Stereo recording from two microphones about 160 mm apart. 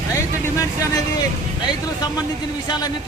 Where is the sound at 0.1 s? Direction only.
20° left (ahead or behind).